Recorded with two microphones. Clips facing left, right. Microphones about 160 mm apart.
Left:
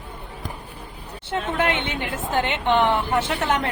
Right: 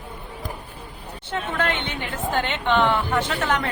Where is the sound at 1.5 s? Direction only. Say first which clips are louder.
Left 2 dB; 15° left (ahead or behind).